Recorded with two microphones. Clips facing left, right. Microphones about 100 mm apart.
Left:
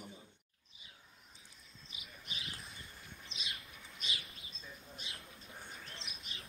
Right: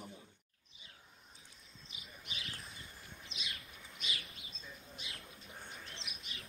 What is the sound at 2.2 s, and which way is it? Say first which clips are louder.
Bird: even; 35° left (ahead or behind).